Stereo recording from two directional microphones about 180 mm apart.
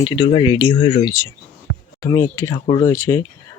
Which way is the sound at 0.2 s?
30° left (ahead or behind).